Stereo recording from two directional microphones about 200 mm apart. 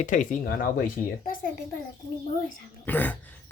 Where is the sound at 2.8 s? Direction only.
10° left (ahead or behind).